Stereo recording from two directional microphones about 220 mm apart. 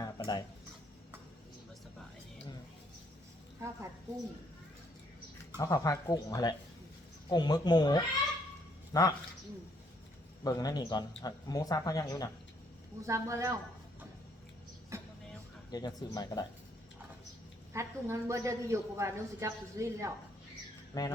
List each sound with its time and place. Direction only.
0.0 s a sound: 20° left (ahead or behind)
5.5 s speech: 15° left (ahead or behind)
10.4 s speech: 15° left (ahead or behind)
13.0 s a woman's voice: 15° right (ahead or behind)
14.9 s vehicle: 15° right (ahead or behind)
15.7 s speech: 20° left (ahead or behind)
17.7 s a woman's voice: 15° right (ahead or behind)
20.9 s speech: 15° left (ahead or behind)